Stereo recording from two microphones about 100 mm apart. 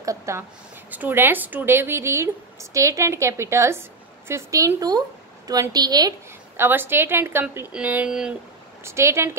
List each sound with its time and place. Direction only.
0.0 s a woman's voice: 30° right (ahead or behind)
0.9 s a woman's voice: 20° right (ahead or behind); by 6.1 s 40° right (ahead or behind)
6.5 s a woman's voice: 20° right (ahead or behind)
8.8 s a woman's voice: 25° right (ahead or behind)